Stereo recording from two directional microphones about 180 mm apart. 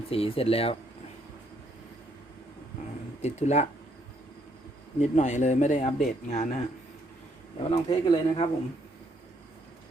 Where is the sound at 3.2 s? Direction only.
40° left (ahead or behind).